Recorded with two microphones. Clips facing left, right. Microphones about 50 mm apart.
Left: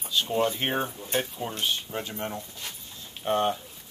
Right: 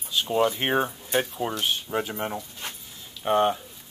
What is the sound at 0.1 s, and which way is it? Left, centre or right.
Speech, centre.